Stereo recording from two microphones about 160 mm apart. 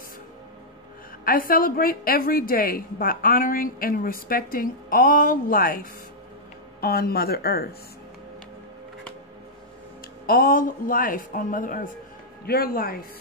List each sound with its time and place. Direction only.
1.2 s a woman's voice: 65° left (ahead or behind)
6.8 s speech: 75° left (ahead or behind)
10.2 s a woman's voice: 65° left (ahead or behind)
12.4 s speech: 70° left (ahead or behind)